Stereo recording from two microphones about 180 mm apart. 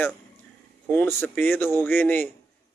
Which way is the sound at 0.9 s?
10° left (ahead or behind).